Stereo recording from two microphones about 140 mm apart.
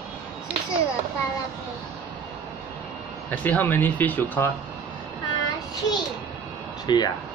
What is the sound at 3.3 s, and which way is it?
Speech, 10° left (ahead or behind).